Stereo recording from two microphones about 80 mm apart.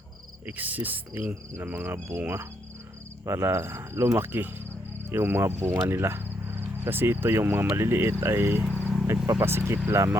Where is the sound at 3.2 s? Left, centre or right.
Right.